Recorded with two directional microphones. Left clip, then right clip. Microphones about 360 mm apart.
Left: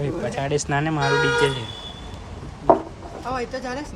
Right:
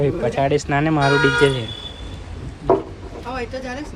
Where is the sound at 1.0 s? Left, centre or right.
Left.